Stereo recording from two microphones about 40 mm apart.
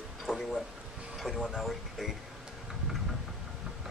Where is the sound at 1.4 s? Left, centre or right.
Centre.